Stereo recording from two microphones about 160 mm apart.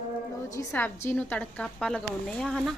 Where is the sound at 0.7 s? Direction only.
10° left (ahead or behind).